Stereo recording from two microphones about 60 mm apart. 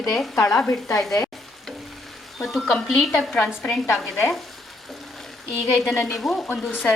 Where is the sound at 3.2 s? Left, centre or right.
Centre.